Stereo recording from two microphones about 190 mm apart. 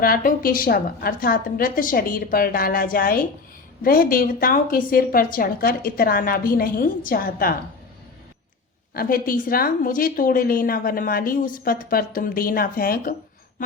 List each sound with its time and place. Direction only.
0.0 s a woman's voice: 50° left (ahead or behind)
8.9 s a woman's voice: 50° left (ahead or behind)